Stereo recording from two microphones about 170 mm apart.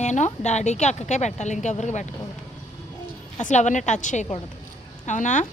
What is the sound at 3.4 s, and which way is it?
Speech, 45° left (ahead or behind).